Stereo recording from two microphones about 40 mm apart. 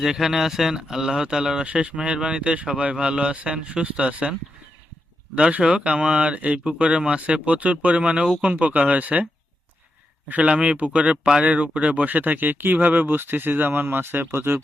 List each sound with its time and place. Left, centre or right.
0.0 s speech: centre
1.6 s speech: right
7.4 s speech: right
10.2 s speech: right